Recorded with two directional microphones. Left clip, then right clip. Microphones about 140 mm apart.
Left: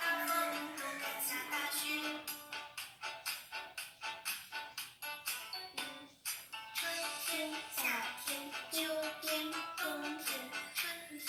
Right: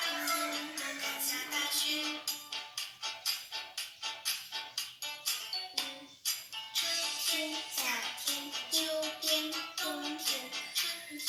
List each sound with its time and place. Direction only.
0.0 s music: 15° right (ahead or behind)